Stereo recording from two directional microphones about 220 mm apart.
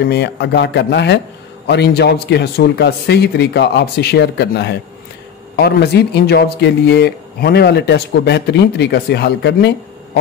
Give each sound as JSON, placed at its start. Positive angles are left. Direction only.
{"t": 0.0, "sound": "speech", "side_deg": 50}